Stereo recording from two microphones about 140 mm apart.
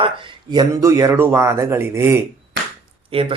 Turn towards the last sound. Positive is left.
turn(degrees=-40)  # may be behind; listen again after turning